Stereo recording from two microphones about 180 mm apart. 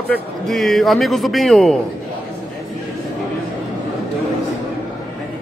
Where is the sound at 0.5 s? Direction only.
Centre (ahead or behind).